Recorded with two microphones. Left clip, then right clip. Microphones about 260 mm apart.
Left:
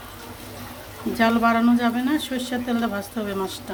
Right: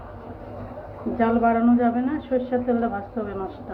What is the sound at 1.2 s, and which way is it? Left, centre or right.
Speech, left.